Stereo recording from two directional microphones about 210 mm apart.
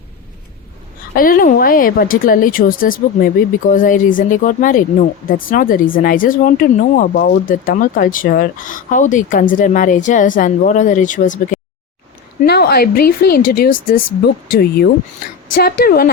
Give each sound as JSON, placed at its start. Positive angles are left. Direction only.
{"t": 1.1, "sound": "speech", "side_deg": 40}
{"t": 12.5, "sound": "a woman's voice", "side_deg": 50}